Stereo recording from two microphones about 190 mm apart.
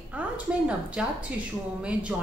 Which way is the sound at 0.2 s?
5° right (ahead or behind).